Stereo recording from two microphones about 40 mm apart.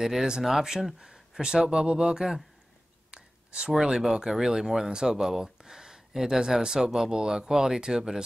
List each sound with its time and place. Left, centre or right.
0.0 s speech: centre